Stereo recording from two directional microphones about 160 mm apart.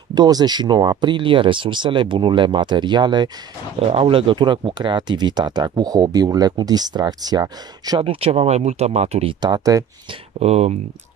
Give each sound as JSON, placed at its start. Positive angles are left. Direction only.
{"t": 0.1, "sound": "speech", "side_deg": -25}
{"t": 8.0, "sound": "speech", "side_deg": -35}
{"t": 9.4, "sound": "speech", "side_deg": -25}
{"t": 10.4, "sound": "speech", "side_deg": -40}